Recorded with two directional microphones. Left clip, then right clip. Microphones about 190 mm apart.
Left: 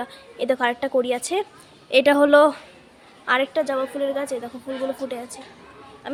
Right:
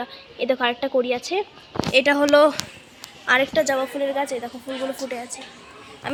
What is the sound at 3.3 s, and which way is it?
A woman's voice, centre (ahead or behind).